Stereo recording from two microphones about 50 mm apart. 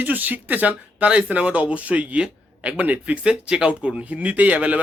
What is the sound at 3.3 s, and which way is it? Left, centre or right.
Speech, centre.